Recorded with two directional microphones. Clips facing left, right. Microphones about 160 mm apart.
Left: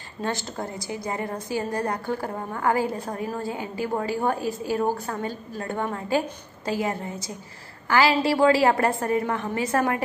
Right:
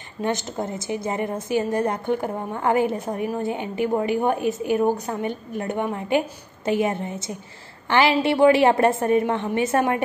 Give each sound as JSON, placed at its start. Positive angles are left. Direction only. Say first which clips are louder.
{"t": 0.2, "sound": "a woman's voice", "louder": "right 4 dB", "side_deg": -20}